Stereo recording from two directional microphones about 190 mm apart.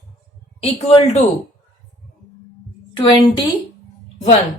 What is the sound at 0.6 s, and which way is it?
Speech, 30° left (ahead or behind).